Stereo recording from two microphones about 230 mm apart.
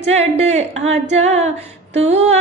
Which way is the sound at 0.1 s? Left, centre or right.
Right.